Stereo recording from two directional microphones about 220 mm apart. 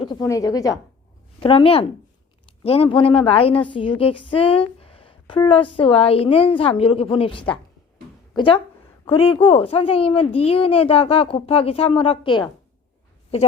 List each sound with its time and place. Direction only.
0.0 s a woman's voice: 20° left (ahead or behind)